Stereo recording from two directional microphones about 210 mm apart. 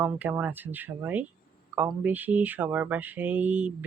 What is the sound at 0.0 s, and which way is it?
Speech, 5° right (ahead or behind).